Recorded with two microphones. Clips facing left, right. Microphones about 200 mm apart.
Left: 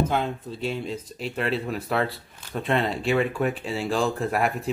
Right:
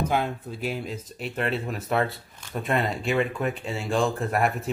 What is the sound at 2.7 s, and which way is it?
A man's voice, centre (ahead or behind).